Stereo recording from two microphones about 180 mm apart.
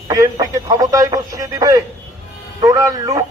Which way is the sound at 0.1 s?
20° right (ahead or behind).